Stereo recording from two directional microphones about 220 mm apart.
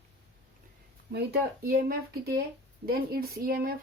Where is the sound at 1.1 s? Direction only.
45° right (ahead or behind).